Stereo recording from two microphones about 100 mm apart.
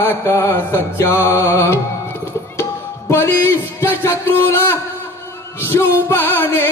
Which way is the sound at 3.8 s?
25° left (ahead or behind).